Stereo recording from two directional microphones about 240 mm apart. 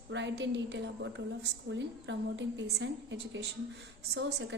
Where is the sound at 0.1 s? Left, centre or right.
Right.